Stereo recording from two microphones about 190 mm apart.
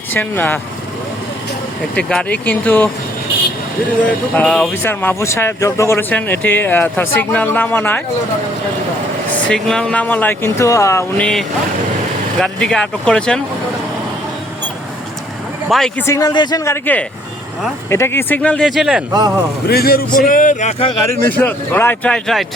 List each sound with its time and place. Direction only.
0.1 s speech: 10° left (ahead or behind)
2.0 s speech: 5° left (ahead or behind)
4.4 s speech: 5° left (ahead or behind)
9.3 s speech: 5° left (ahead or behind)
12.4 s speech: 5° left (ahead or behind)
15.7 s speech: centre (ahead or behind)
16.0 s speech: 20° left (ahead or behind); by 19.0 s centre (ahead or behind)
19.1 s speech: 20° right (ahead or behind)
19.6 s speech: 55° left (ahead or behind); by 20.9 s 35° left (ahead or behind)
21.2 s speech: 10° left (ahead or behind)